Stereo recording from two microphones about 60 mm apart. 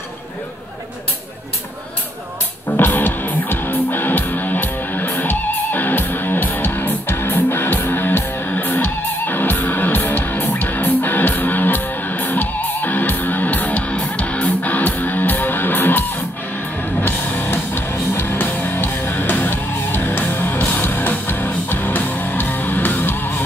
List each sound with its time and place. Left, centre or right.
2.8 s music: left